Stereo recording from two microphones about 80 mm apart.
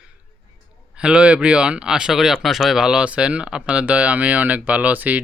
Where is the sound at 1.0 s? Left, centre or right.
Centre.